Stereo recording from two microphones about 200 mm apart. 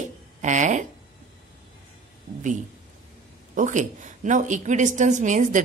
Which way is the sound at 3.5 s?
40° right (ahead or behind).